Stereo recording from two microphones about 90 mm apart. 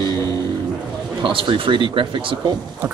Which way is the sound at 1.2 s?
70° right (ahead or behind).